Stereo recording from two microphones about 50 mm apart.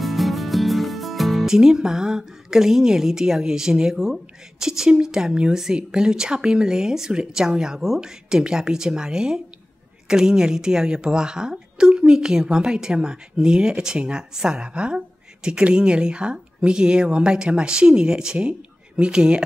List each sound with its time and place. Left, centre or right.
0.0 s a woman's voice: centre